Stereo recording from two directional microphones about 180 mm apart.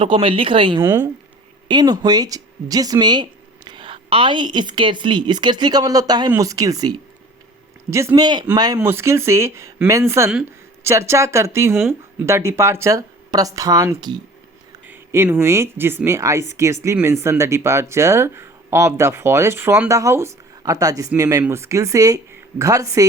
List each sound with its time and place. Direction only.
0.0 s speech: 30° right (ahead or behind)
0.8 s speech: 15° right (ahead or behind)